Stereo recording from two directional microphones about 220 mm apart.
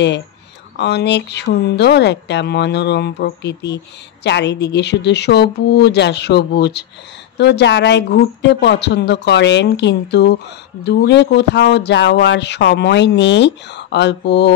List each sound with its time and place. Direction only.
0.7 s speech: 50° left (ahead or behind)